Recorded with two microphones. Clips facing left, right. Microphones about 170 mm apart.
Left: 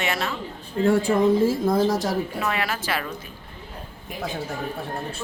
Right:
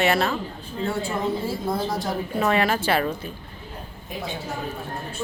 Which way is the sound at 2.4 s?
30° right (ahead or behind).